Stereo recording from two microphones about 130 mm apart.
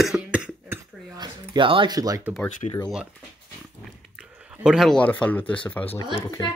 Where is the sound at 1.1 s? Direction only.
35° right (ahead or behind).